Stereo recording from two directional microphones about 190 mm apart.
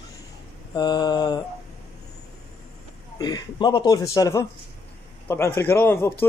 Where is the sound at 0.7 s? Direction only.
20° left (ahead or behind).